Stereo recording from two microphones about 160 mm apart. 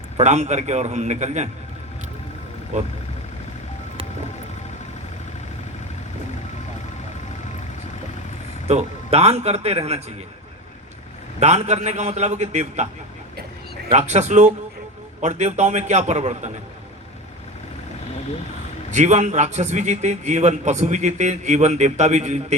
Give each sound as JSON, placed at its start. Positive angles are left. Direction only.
{"t": 0.2, "sound": "a man's voice", "side_deg": -45}
{"t": 2.7, "sound": "a man's voice", "side_deg": -50}
{"t": 8.6, "sound": "a man's voice", "side_deg": -40}
{"t": 11.3, "sound": "a man's voice", "side_deg": -45}
{"t": 13.9, "sound": "a man's voice", "side_deg": -45}
{"t": 18.9, "sound": "a man's voice", "side_deg": -50}